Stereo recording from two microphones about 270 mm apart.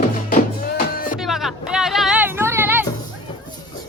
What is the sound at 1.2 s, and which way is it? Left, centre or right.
Music, centre.